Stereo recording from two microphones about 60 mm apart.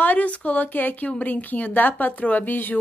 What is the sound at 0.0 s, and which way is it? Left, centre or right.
A woman's voice, left.